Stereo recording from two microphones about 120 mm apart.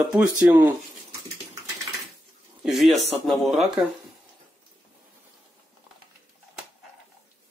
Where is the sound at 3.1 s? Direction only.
Centre (ahead or behind).